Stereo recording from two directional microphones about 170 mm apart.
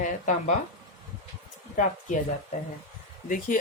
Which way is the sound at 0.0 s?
45° left (ahead or behind).